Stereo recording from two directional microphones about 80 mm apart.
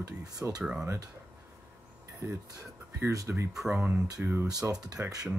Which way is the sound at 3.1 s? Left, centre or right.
Right.